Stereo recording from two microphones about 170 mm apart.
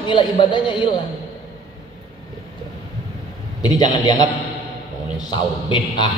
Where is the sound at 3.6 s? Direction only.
25° left (ahead or behind).